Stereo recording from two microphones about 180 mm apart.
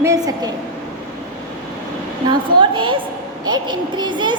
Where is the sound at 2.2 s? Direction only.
25° right (ahead or behind).